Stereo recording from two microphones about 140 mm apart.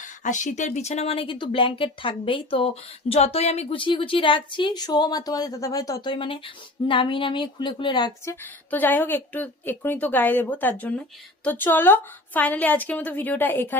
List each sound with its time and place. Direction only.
0.0 s speech: 60° left (ahead or behind); by 6.1 s 25° left (ahead or behind)
6.1 s speech: 40° left (ahead or behind)
8.2 s a woman's voice: 15° left (ahead or behind)